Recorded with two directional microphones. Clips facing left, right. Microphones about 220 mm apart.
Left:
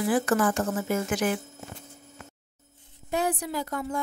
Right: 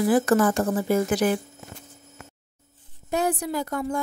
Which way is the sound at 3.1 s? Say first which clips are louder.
Right 3 dB; 45° right (ahead or behind).